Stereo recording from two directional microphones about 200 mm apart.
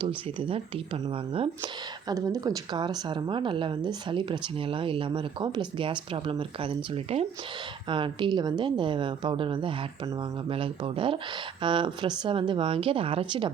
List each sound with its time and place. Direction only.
0.0 s speech: 25° right (ahead or behind)